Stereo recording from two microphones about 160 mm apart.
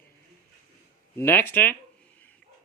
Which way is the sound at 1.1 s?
10° left (ahead or behind).